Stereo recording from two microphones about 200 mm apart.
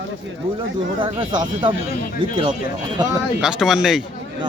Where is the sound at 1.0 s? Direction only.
25° right (ahead or behind).